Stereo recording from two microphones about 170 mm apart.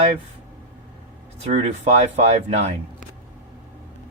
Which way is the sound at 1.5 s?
45° right (ahead or behind).